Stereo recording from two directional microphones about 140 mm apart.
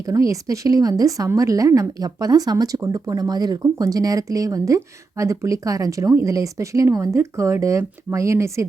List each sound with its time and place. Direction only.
0.0 s a woman's voice: 25° right (ahead or behind)